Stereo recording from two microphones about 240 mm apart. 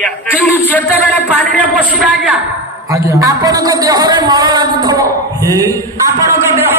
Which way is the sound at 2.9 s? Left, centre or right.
Centre.